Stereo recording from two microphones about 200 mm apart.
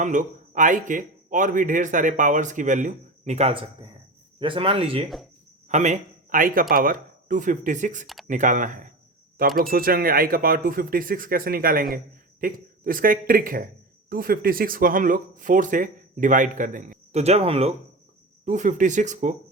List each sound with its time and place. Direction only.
0.0 s a man's voice: 40° right (ahead or behind)